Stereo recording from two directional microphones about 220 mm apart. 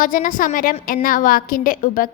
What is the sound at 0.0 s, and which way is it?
A woman's voice, 40° left (ahead or behind).